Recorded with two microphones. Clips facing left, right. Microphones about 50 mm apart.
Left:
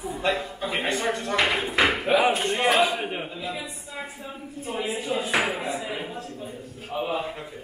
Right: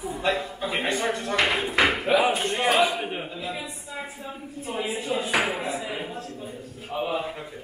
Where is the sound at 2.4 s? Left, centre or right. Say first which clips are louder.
Left 1 dB; centre.